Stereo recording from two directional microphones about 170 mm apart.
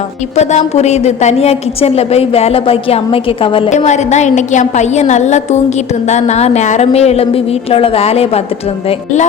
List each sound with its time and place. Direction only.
0.3 s a woman's voice: 40° left (ahead or behind)
3.7 s a woman's voice: 45° left (ahead or behind)